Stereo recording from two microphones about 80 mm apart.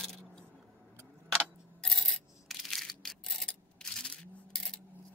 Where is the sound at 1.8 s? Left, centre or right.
Centre.